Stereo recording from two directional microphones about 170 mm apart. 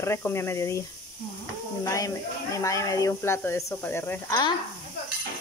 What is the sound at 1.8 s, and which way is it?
Speech, 20° left (ahead or behind).